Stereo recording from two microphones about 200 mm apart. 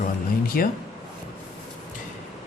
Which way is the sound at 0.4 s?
45° left (ahead or behind).